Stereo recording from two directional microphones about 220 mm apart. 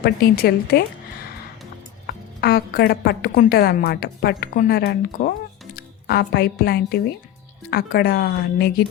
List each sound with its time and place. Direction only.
0.0 s a woman's voice: 45° left (ahead or behind)
2.0 s a woman's voice: 45° left (ahead or behind)